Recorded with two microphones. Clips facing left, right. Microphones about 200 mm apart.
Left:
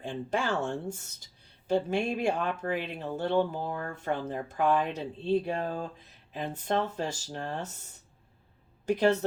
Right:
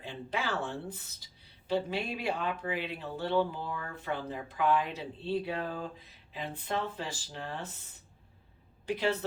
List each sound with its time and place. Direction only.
0.0 s speech: 45° left (ahead or behind)